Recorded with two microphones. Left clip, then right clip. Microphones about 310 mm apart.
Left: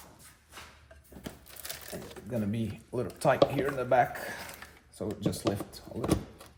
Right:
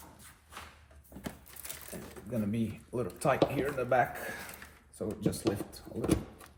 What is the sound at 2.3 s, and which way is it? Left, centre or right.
Speech, left.